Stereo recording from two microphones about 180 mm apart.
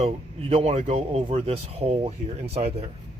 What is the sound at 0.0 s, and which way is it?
Speech, 30° right (ahead or behind).